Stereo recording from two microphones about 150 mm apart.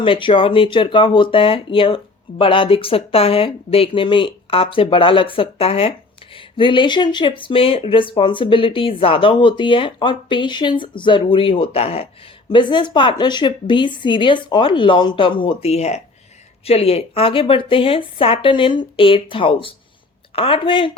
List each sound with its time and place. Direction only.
0.0 s speech: 35° left (ahead or behind)